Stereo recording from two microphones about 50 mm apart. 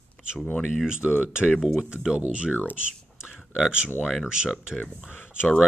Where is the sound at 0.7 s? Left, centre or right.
Centre.